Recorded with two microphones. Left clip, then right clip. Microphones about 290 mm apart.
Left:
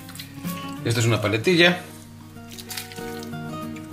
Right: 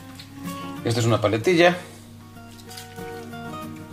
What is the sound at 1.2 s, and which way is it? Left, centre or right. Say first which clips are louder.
Speech: even; right.